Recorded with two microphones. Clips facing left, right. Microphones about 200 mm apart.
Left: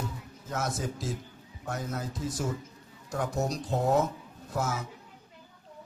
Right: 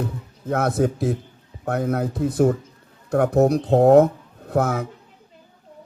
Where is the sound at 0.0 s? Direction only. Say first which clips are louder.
Right 10 dB; 60° right (ahead or behind).